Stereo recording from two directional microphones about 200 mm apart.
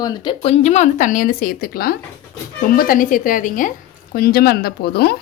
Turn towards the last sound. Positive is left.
turn(degrees=55)  # may be behind; listen again after turning